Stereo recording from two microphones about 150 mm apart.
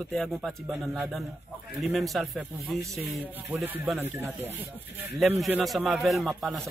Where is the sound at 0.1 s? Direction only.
Centre (ahead or behind).